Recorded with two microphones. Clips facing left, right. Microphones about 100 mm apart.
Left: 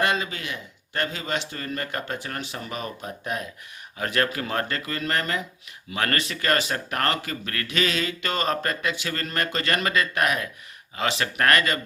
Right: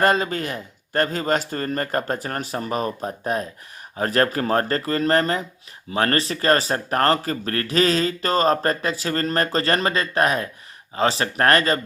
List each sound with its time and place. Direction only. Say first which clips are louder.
0.0 s speech: right 6 dB; 40° right (ahead or behind)